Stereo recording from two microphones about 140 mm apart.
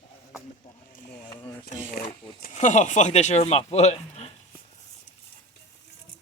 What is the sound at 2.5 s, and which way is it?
Speech, 60° left (ahead or behind).